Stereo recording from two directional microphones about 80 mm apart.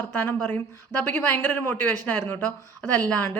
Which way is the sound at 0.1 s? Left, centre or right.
Left.